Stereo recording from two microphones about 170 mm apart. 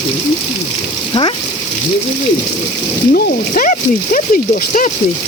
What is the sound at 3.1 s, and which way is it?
Speech, 50° left (ahead or behind).